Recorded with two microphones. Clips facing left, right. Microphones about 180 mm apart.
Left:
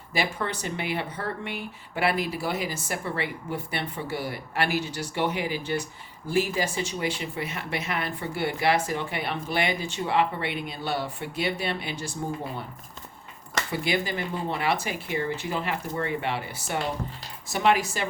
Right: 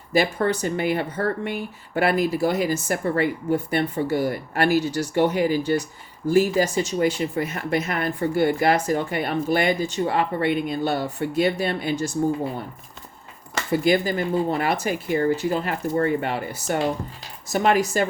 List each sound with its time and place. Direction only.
0.1 s speech: 45° right (ahead or behind)
13.7 s speech: 45° right (ahead or behind)